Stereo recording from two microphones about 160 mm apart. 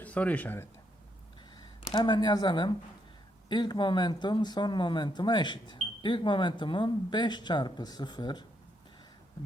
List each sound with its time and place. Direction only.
0.0 s speech: 10° left (ahead or behind)
1.6 s speech: 30° left (ahead or behind)